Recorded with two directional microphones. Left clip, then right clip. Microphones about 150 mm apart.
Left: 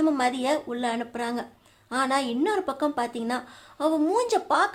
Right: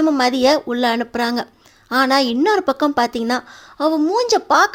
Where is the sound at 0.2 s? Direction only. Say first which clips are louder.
Right 10 dB; 40° right (ahead or behind).